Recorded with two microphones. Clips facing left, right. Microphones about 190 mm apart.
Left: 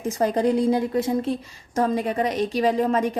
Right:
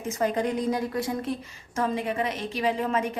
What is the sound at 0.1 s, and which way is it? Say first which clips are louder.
A woman's voice: left 5 dB; 35° left (ahead or behind).